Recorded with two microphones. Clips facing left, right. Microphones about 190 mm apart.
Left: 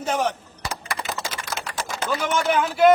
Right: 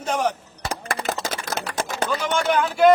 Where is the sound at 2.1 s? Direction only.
5° left (ahead or behind).